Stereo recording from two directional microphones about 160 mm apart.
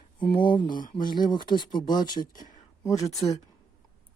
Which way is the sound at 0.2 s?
30° left (ahead or behind).